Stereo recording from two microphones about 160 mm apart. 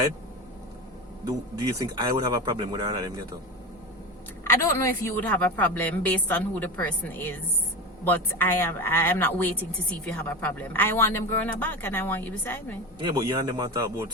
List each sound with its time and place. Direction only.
1.8 s speech: 25° right (ahead or behind)
4.5 s a woman's voice: 15° left (ahead or behind)
13.0 s speech: 25° right (ahead or behind)